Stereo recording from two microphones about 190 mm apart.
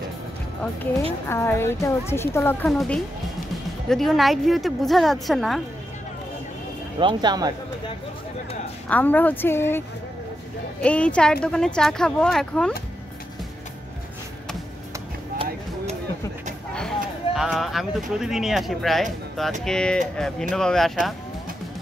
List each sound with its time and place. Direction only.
1.2 s a woman's voice: 15° left (ahead or behind)
7.0 s speech: 25° right (ahead or behind)
8.8 s a woman's voice: 10° left (ahead or behind)
16.7 s a sound: centre (ahead or behind)
18.2 s a woman's voice: centre (ahead or behind)